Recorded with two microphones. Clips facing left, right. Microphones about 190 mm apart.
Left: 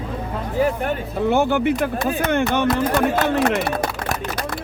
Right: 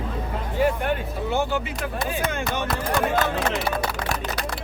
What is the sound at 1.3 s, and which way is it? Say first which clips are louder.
Speech: left 8 dB; 65° left (ahead or behind).